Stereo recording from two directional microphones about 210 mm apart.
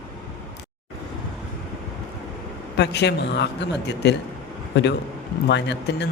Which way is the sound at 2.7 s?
55° left (ahead or behind).